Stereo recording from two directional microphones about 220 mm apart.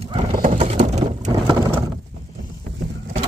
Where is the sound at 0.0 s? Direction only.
25° right (ahead or behind).